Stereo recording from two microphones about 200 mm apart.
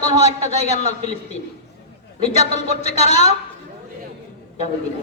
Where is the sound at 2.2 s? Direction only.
35° left (ahead or behind).